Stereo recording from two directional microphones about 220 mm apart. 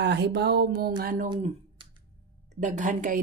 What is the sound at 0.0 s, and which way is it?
Speech, 50° right (ahead or behind).